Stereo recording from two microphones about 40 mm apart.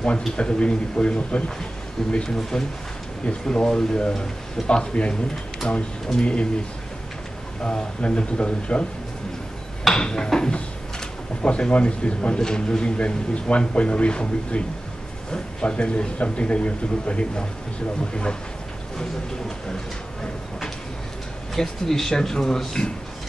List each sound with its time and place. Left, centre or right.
0.4 s a man's voice: left
2.1 s a man's voice: centre
7.6 s a man's voice: left
9.9 s a man's voice: centre
21.5 s speech: centre